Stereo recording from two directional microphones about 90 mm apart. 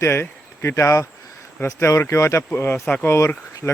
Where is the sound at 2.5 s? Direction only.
20° left (ahead or behind).